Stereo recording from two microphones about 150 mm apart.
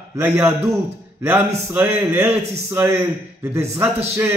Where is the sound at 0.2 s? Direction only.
15° right (ahead or behind).